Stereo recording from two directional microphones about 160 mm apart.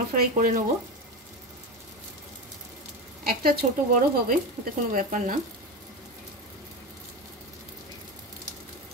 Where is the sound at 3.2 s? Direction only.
65° right (ahead or behind).